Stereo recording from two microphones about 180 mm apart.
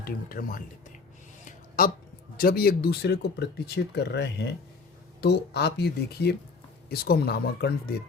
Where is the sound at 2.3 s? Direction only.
55° left (ahead or behind).